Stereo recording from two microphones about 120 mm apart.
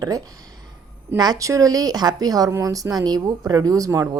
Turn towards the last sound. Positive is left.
turn(degrees=-30)  # may be behind; listen again after turning